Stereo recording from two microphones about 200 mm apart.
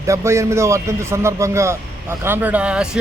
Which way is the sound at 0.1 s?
15° right (ahead or behind).